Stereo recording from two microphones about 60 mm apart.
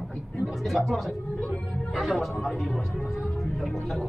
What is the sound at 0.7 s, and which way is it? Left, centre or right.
Speech, centre.